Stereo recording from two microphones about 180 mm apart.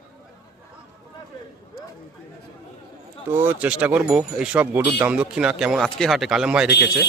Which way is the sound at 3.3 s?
10° right (ahead or behind).